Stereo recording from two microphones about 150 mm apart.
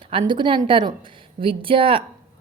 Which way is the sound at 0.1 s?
35° right (ahead or behind).